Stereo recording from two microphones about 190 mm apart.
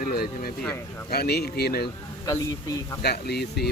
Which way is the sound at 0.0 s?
50° left (ahead or behind).